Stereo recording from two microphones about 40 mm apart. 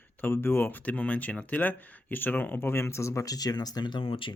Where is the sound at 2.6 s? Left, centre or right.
Left.